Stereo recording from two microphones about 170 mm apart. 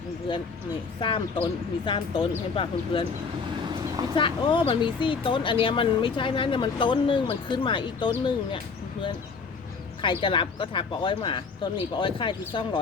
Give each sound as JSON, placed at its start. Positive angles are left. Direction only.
{"t": 0.3, "sound": "speech", "side_deg": 25}
{"t": 4.1, "sound": "speech", "side_deg": 30}
{"t": 10.0, "sound": "speech", "side_deg": 30}